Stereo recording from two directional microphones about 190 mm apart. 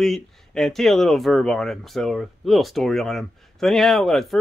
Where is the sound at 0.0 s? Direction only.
Centre (ahead or behind).